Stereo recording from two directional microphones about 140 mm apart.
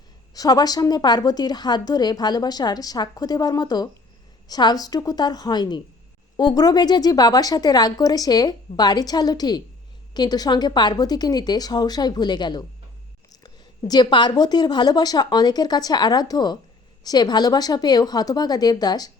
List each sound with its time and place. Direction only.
0.3 s a woman's voice: 25° left (ahead or behind)